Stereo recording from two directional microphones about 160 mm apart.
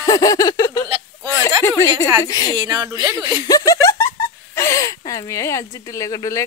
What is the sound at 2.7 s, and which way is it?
Speech, 20° right (ahead or behind).